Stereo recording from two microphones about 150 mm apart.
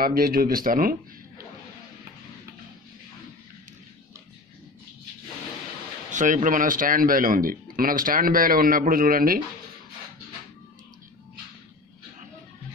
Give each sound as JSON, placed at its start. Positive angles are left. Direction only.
{"t": 0.0, "sound": "speech", "side_deg": -80}
{"t": 6.1, "sound": "speech", "side_deg": -60}